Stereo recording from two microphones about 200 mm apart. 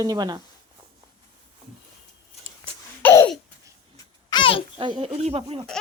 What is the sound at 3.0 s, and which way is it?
Laughter, 10° left (ahead or behind).